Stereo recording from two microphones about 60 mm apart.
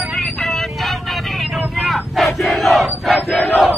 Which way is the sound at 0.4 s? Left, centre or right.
Centre.